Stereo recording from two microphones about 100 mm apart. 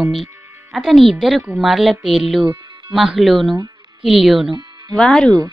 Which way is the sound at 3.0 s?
5° right (ahead or behind).